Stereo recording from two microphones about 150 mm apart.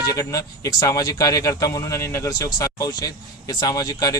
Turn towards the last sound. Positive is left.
turn(degrees=25)  # may be behind; listen again after turning